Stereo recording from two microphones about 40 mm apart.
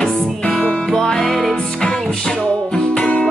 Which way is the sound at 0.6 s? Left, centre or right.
Left.